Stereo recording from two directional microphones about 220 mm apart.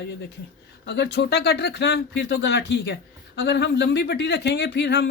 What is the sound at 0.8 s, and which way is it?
Speech, 50° left (ahead or behind).